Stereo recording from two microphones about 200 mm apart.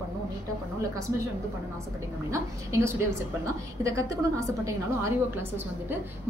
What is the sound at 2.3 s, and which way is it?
A woman's voice, 15° right (ahead or behind).